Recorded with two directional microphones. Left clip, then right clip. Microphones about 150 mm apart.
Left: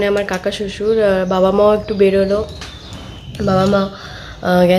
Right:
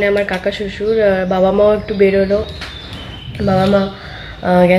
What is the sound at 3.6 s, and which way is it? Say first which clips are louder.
Speech: right 2 dB; 15° left (ahead or behind).